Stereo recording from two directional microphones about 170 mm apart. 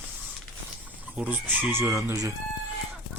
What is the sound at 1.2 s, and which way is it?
Speech, 10° right (ahead or behind).